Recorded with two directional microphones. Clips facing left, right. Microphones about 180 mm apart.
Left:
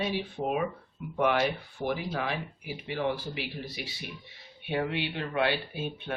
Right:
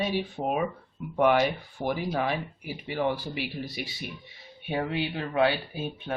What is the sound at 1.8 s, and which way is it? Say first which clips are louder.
A man's voice: right 3 dB; 45° right (ahead or behind).